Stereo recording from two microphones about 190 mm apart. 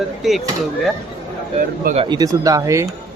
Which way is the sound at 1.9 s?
25° right (ahead or behind).